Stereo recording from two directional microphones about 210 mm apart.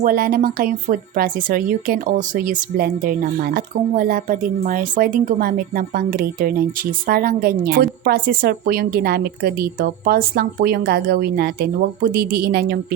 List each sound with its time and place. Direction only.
0.0 s a woman's voice: 45° right (ahead or behind)